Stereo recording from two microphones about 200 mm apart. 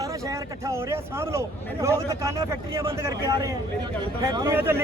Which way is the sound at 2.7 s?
25° right (ahead or behind).